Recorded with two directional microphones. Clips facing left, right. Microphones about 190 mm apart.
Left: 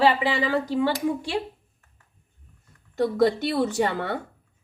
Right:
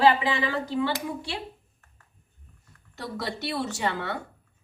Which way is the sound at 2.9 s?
50° left (ahead or behind).